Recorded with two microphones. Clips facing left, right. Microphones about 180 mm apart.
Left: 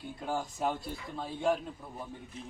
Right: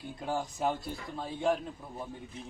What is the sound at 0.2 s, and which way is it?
A man's voice, centre (ahead or behind).